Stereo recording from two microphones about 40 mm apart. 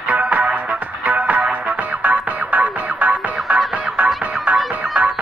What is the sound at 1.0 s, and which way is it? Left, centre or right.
Music, right.